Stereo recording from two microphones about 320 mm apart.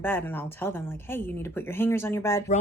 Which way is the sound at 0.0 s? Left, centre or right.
Centre.